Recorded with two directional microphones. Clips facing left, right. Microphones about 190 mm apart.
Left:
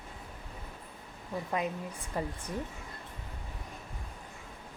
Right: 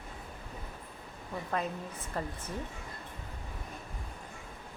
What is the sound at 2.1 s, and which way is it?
Speech, 10° left (ahead or behind).